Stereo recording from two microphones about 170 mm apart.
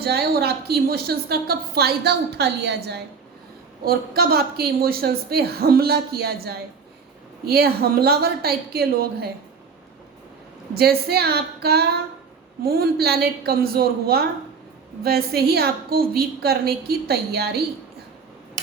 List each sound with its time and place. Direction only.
0.0 s a woman's voice: 70° right (ahead or behind)
3.8 s a woman's voice: 65° right (ahead or behind)
10.8 s a woman's voice: 65° right (ahead or behind)